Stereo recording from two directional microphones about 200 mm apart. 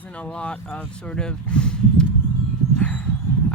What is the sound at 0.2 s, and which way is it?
Speech, 5° left (ahead or behind).